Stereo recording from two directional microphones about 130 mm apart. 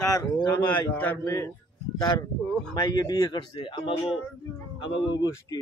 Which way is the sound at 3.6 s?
40° left (ahead or behind).